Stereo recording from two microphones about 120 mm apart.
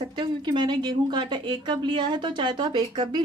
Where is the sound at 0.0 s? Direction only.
40° right (ahead or behind).